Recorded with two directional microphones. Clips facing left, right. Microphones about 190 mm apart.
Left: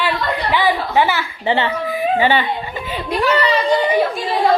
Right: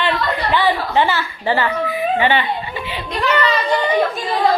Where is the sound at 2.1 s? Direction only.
35° left (ahead or behind).